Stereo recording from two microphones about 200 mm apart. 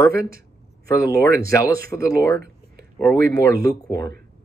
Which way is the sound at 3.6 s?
20° left (ahead or behind).